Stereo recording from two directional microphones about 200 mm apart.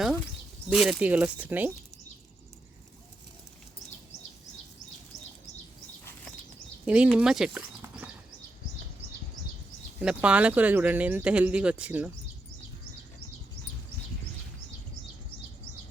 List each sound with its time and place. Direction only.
0.7 s speech: 5° right (ahead or behind)
6.8 s speech: 5° right (ahead or behind)
10.0 s speech: 5° right (ahead or behind)